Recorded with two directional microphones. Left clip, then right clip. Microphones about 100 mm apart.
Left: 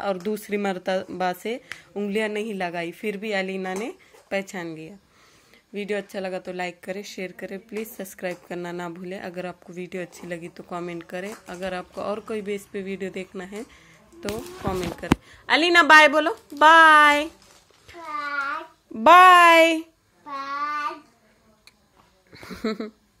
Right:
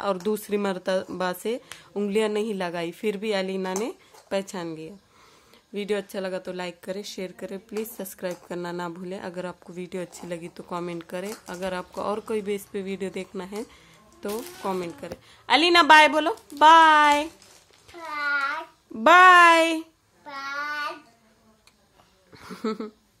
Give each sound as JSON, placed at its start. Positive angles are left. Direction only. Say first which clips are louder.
{"t": 0.0, "sound": "a woman's voice", "louder": "right 1 dB", "side_deg": -35}
{"t": 5.7, "sound": "a woman's voice", "louder": "even", "side_deg": -35}
{"t": 15.0, "sound": "a woman's voice", "louder": "left 13 dB", "side_deg": -10}
{"t": 18.1, "sound": "a sound", "louder": "right 3 dB", "side_deg": -35}
{"t": 19.0, "sound": "a woman's voice", "louder": "left 2 dB", "side_deg": -10}
{"t": 22.3, "sound": "a sound", "louder": "left 1 dB", "side_deg": -10}